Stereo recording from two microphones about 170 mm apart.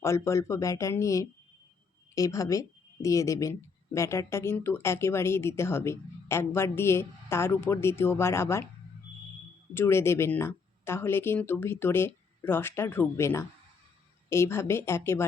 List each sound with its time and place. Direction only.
0.0 s a woman's voice: 15° left (ahead or behind)
9.7 s a woman's voice: 15° left (ahead or behind)